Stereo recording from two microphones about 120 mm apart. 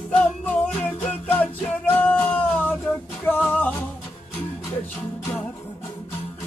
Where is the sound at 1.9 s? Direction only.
10° left (ahead or behind).